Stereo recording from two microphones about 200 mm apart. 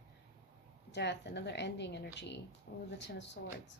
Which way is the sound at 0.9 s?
60° left (ahead or behind).